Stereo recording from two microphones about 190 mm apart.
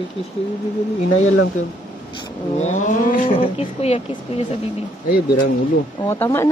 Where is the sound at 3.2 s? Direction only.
30° left (ahead or behind).